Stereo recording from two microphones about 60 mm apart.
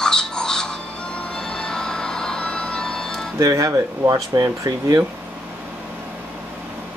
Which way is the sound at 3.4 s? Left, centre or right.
Right.